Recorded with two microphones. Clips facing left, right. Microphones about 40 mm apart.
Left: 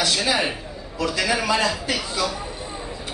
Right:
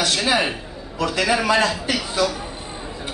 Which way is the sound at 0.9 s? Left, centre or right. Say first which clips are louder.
Right 3 dB; right.